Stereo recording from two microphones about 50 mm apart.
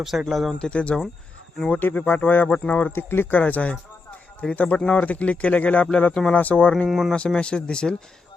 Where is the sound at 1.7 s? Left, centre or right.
Left.